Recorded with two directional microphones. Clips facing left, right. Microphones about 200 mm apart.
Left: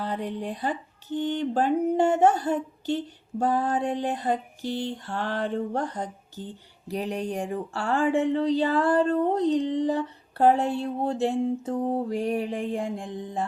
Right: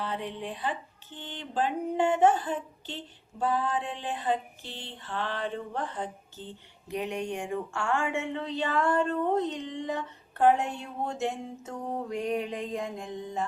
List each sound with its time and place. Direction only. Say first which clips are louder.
0.0 s music: left 4 dB; 40° left (ahead or behind)